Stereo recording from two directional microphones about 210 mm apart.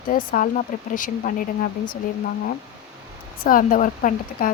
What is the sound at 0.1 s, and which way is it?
Speech, 40° left (ahead or behind).